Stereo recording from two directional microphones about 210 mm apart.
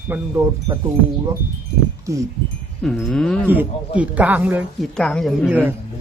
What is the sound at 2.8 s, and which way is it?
Speech, centre (ahead or behind).